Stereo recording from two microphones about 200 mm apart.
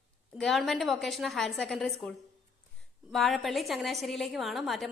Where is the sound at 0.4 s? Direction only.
Centre (ahead or behind).